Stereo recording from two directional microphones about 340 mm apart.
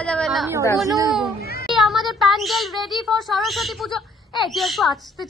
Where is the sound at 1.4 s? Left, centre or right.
Left.